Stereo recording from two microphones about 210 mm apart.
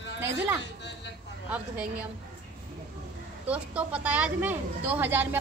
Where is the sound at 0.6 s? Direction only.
55° left (ahead or behind).